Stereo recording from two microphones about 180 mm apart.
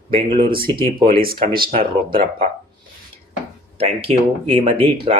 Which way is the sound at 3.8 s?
35° right (ahead or behind).